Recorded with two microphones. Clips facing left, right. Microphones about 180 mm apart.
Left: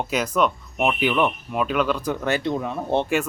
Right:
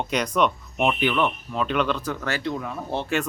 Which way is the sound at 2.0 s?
20° left (ahead or behind).